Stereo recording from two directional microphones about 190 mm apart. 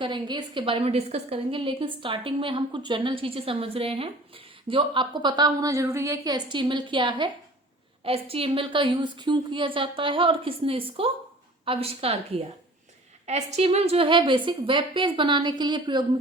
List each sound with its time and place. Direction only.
0.0 s a woman's voice: 25° right (ahead or behind)